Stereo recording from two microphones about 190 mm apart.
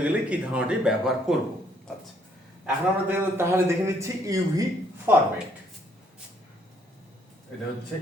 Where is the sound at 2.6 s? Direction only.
10° right (ahead or behind).